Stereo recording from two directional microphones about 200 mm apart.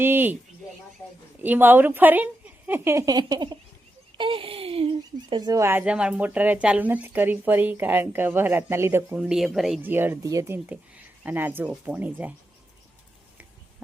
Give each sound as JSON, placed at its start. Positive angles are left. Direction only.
{"t": 0.0, "sound": "speech", "side_deg": -10}
{"t": 1.4, "sound": "speech", "side_deg": -10}
{"t": 4.2, "sound": "a sound", "side_deg": -25}
{"t": 5.3, "sound": "speech", "side_deg": -15}